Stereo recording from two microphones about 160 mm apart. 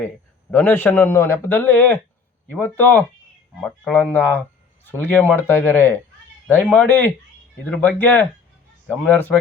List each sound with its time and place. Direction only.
0.5 s speech: 15° left (ahead or behind)